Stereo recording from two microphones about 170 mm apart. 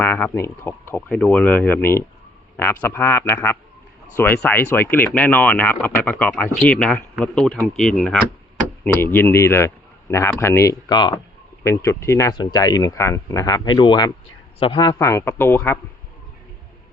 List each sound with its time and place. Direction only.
0.0 s speech: 10° left (ahead or behind); by 14.9 s 30° left (ahead or behind)
14.9 s speech: 15° left (ahead or behind)